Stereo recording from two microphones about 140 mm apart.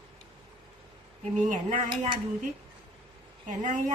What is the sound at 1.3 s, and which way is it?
Speech, 60° right (ahead or behind).